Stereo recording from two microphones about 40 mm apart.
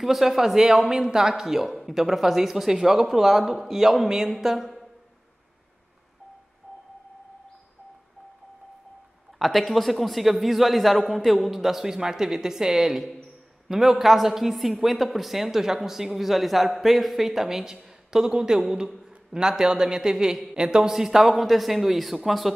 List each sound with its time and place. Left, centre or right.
0.0 s speech: centre
9.4 s a man's voice: centre